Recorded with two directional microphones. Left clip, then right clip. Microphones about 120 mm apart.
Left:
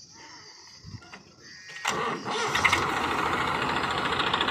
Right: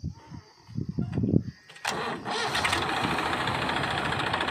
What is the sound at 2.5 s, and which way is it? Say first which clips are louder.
Vehicle: left 5 dB; 20° right (ahead or behind).